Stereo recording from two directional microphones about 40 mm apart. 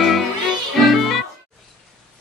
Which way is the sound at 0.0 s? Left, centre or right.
Centre.